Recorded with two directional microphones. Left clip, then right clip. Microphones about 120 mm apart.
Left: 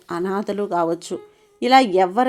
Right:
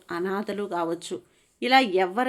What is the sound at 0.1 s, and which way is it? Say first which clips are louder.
Speech: left 5 dB; 40° left (ahead or behind).